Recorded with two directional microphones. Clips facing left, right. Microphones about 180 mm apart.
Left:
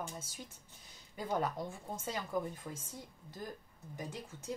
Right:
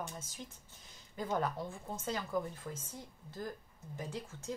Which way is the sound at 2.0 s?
10° left (ahead or behind).